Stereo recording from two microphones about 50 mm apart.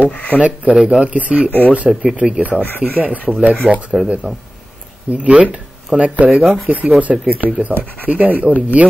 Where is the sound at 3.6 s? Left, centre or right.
Left.